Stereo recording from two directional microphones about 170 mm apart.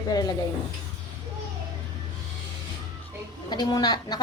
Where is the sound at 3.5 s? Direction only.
25° left (ahead or behind).